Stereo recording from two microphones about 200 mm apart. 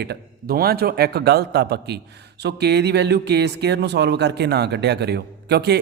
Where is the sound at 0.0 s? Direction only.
50° right (ahead or behind).